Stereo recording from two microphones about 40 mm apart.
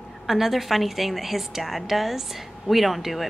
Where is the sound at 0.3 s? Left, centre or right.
Centre.